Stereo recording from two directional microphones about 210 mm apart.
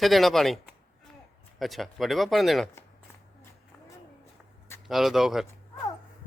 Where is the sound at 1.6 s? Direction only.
Centre (ahead or behind).